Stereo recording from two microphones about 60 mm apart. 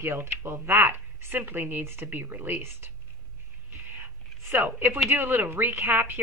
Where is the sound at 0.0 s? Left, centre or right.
Right.